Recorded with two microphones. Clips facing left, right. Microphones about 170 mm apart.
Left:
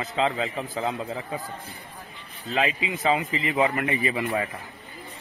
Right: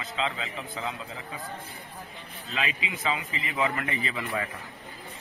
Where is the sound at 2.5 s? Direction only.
35° left (ahead or behind).